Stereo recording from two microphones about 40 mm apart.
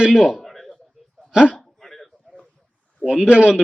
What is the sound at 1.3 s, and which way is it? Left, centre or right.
Speech, right.